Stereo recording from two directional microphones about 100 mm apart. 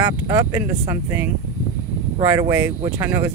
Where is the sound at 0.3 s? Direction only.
30° right (ahead or behind).